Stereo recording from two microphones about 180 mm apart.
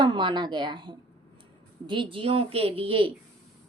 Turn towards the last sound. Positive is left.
turn(degrees=-30)  # may be behind; listen again after turning